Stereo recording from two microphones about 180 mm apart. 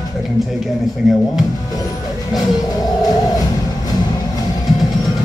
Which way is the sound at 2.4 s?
20° left (ahead or behind).